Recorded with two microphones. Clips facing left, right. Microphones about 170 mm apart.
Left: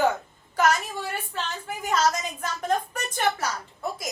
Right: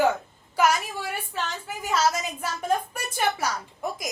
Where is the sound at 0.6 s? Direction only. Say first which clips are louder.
Even; 10° right (ahead or behind).